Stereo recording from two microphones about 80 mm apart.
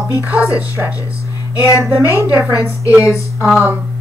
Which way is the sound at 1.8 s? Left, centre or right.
Right.